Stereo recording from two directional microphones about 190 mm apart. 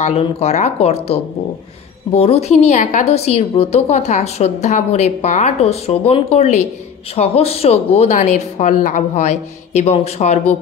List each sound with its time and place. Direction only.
0.0 s a woman's voice: 35° left (ahead or behind)